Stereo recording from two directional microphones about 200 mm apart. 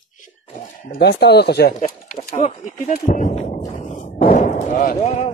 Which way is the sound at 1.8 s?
40° left (ahead or behind).